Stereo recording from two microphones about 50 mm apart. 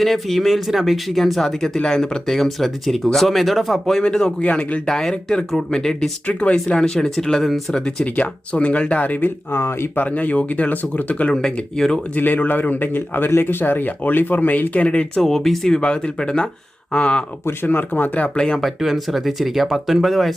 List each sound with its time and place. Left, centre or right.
0.0 s speech: centre
4.0 s speech: centre
4.4 s speech: left
4.9 s speech: centre
6.2 s speech: left; by 7.6 s centre
7.7 s speech: centre; by 9.3 s left
9.5 s speech: left
9.9 s a man's voice: left
11.3 s speech: centre
12.1 s a man's voice: left
15.2 s speech: centre
17.7 s a man's voice: left
18.3 s speech: centre
18.6 s speech: centre